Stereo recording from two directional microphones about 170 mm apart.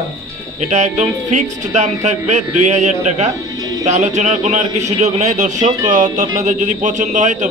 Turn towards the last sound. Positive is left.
turn(degrees=-45)  # may be behind; listen again after turning